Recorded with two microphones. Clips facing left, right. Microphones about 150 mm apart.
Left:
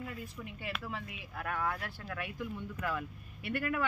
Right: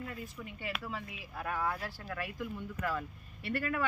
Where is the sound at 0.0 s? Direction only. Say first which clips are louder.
Even; centre (ahead or behind).